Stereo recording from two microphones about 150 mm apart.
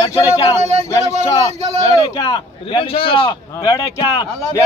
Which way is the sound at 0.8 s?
20° left (ahead or behind).